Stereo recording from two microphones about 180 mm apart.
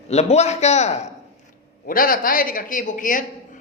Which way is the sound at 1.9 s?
50° left (ahead or behind).